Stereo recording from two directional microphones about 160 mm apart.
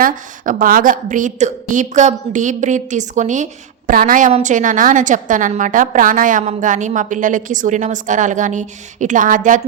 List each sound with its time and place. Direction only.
0.0 s a woman's voice: 60° right (ahead or behind)
4.3 s a woman's voice: 45° right (ahead or behind)